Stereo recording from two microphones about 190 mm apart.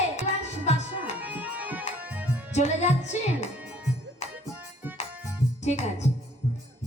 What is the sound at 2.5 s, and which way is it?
Music, 35° left (ahead or behind).